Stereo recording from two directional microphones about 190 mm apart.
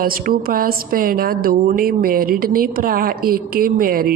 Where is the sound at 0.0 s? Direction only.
50° right (ahead or behind).